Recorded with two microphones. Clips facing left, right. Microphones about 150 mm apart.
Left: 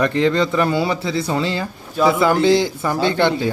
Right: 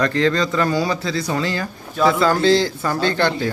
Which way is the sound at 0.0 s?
20° left (ahead or behind).